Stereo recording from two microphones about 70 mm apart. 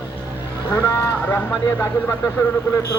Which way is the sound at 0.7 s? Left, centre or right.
Left.